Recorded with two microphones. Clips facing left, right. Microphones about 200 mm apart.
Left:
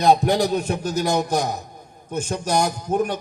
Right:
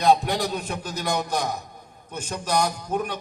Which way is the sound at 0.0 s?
45° left (ahead or behind).